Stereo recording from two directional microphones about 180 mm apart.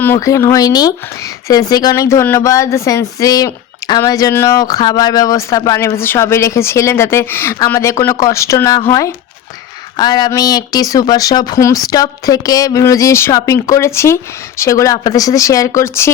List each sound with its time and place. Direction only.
0.0 s a woman's voice: 15° left (ahead or behind)